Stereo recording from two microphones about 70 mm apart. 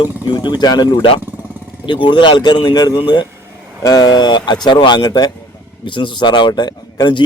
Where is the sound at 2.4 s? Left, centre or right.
Left.